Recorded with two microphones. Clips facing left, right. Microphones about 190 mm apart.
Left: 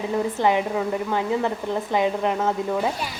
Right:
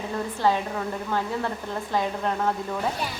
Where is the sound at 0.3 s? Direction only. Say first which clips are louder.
Left 1 dB; 15° left (ahead or behind).